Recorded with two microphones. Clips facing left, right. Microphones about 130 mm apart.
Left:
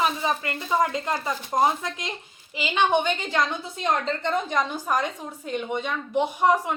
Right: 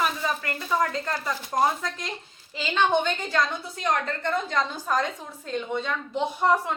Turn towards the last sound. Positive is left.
turn(degrees=15)  # may be behind; listen again after turning